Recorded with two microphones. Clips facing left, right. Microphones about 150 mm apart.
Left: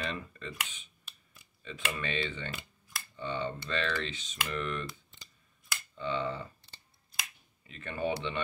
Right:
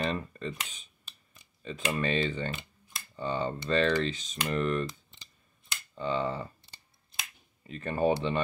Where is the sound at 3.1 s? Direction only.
40° right (ahead or behind).